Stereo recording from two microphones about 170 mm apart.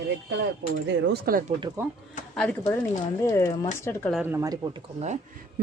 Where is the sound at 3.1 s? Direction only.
20° left (ahead or behind).